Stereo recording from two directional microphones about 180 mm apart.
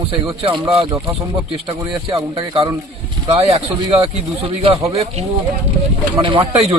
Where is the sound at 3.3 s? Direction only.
35° right (ahead or behind).